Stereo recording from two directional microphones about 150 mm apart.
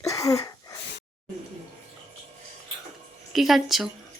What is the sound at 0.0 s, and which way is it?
Wheeze, 25° left (ahead or behind).